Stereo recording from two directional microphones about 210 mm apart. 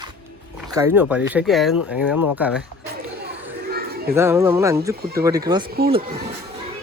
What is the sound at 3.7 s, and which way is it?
Children playing, 45° right (ahead or behind).